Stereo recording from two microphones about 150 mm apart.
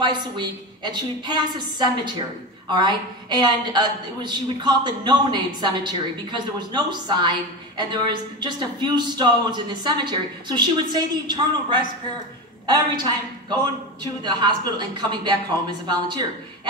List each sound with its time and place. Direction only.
0.0 s a woman's voice: 30° right (ahead or behind)